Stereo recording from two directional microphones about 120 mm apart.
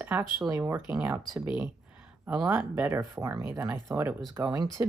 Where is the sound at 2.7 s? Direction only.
25° right (ahead or behind).